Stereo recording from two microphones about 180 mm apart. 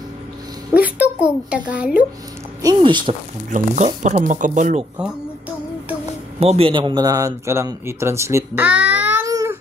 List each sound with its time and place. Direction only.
0.7 s speech: 10° right (ahead or behind)
2.6 s speech: 25° right (ahead or behind)
3.4 s speech: 45° right (ahead or behind)
6.4 s speech: 30° right (ahead or behind); by 8.8 s 10° right (ahead or behind)
8.9 s child singing: 10° right (ahead or behind)